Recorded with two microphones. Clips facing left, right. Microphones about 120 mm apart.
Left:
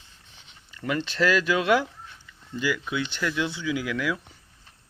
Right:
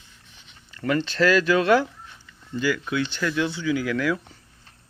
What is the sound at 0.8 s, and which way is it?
Speech, 10° left (ahead or behind).